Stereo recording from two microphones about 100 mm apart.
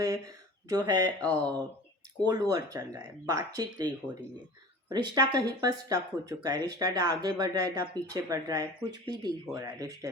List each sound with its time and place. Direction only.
0.0 s speech: 35° right (ahead or behind)